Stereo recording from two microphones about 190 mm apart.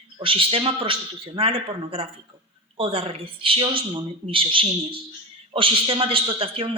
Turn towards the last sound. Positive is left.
turn(degrees=-30)  # may be behind; listen again after turning